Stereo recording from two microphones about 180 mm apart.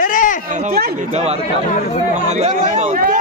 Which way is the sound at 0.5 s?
40° right (ahead or behind).